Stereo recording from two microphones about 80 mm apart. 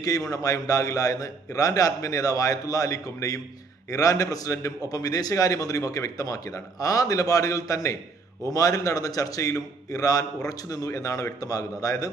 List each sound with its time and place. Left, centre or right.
0.0 s a man's voice: left